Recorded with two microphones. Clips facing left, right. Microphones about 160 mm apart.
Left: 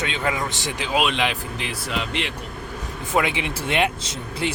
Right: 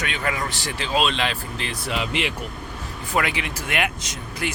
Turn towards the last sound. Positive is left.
turn(degrees=30)  # may be behind; listen again after turning